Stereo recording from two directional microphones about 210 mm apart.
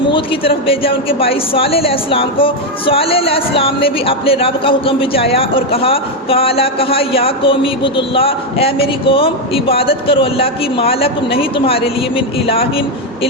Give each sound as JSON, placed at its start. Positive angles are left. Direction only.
{"t": 0.1, "sound": "speech", "side_deg": 25}